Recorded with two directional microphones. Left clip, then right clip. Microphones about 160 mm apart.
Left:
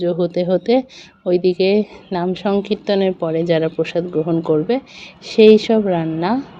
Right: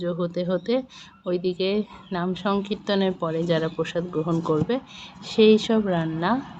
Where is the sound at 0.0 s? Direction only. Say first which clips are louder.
Left 9 dB; 20° left (ahead or behind).